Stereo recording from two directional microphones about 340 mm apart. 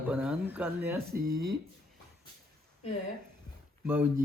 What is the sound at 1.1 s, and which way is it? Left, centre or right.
Speech, right.